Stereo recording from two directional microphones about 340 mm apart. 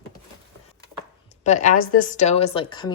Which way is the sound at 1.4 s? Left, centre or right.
Left.